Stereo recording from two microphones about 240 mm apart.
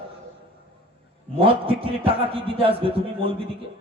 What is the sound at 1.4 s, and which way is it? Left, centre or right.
A man's voice, right.